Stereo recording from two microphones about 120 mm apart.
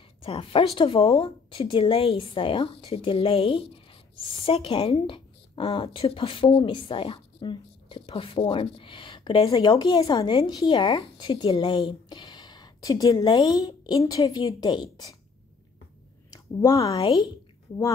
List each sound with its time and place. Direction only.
0.2 s a woman's voice: 50° left (ahead or behind)
16.5 s speech: 30° left (ahead or behind)